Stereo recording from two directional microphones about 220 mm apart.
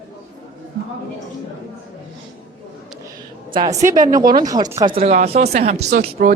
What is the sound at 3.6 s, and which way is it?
A woman's voice, 15° right (ahead or behind).